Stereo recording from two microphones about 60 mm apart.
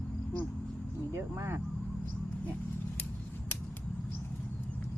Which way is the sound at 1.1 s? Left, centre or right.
Right.